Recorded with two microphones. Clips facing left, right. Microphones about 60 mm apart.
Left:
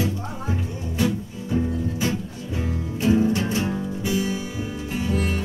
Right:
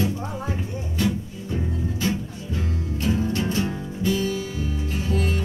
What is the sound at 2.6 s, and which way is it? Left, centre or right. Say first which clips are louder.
Music: left 3 dB; centre.